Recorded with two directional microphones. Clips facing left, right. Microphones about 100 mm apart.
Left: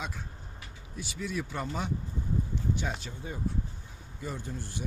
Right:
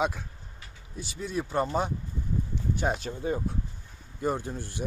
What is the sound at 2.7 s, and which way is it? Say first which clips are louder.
Speech: right 7 dB; 50° right (ahead or behind).